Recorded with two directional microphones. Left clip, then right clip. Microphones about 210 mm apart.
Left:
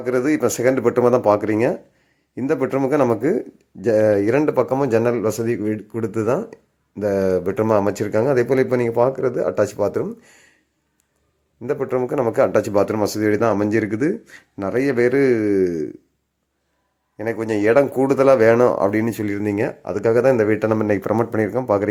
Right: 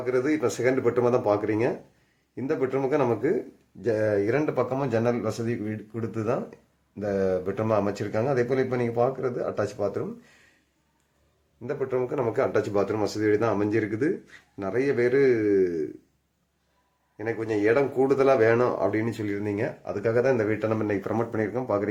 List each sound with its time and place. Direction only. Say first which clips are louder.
0.0 s speech: left 6 dB; 40° left (ahead or behind)
11.6 s speech: left 6 dB; 40° left (ahead or behind)
17.2 s speech: left 5 dB; 40° left (ahead or behind)